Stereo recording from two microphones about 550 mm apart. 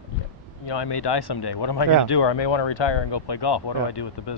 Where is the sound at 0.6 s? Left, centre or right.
Left.